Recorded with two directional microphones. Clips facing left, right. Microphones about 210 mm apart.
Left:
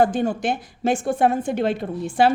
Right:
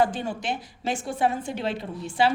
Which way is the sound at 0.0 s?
50° left (ahead or behind).